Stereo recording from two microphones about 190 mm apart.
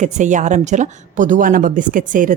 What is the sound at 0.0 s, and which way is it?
A woman's voice, 40° right (ahead or behind).